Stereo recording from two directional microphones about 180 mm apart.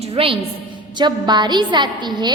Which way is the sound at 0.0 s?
30° right (ahead or behind).